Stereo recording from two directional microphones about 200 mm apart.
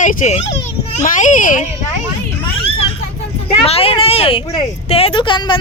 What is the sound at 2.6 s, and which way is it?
Children playing, 25° left (ahead or behind).